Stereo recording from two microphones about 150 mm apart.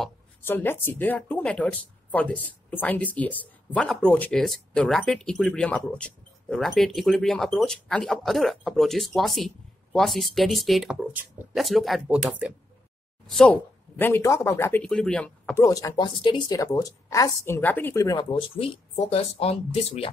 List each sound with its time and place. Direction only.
0.4 s speech: 15° left (ahead or behind); by 11.4 s 10° right (ahead or behind)
11.5 s speech: centre (ahead or behind)
13.3 s speech: 5° left (ahead or behind)
14.8 s speech: 5° left (ahead or behind)
15.6 s a woman's voice: 20° left (ahead or behind)
18.0 s speech: 30° left (ahead or behind)